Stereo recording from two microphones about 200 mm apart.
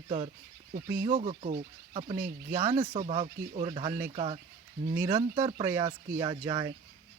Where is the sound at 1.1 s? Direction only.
35° right (ahead or behind).